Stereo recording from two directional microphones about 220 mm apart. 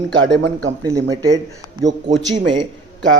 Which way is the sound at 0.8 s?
15° right (ahead or behind).